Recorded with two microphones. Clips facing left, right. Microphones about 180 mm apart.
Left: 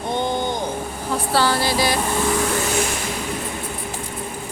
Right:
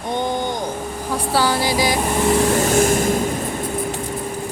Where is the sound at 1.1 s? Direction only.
10° right (ahead or behind).